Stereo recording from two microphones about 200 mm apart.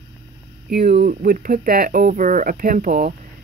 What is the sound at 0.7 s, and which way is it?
Speech, 50° right (ahead or behind).